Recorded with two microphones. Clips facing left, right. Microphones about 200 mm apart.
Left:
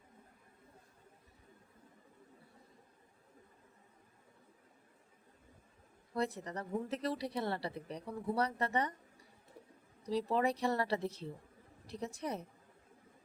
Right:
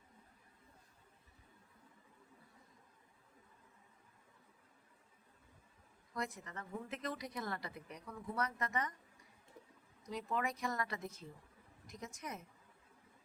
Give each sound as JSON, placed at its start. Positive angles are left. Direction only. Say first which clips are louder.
{"t": 6.1, "sound": "speech", "louder": "left 7 dB", "side_deg": 35}
{"t": 10.0, "sound": "speech", "louder": "left 7 dB", "side_deg": 35}